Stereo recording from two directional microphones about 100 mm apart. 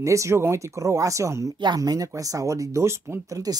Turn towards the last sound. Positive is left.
turn(degrees=-35)  # may be behind; listen again after turning